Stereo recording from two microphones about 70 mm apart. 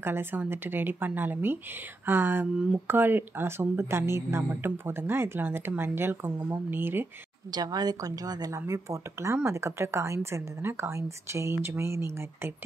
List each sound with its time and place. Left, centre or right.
0.0 s speech: right
7.5 s a woman's voice: right
8.5 s speech: right